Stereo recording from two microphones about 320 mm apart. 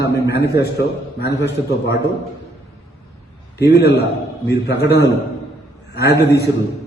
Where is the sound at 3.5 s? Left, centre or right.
Left.